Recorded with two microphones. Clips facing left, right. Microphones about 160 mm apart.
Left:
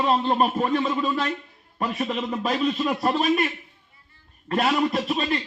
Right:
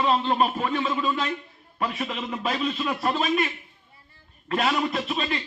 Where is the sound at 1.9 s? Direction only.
25° left (ahead or behind).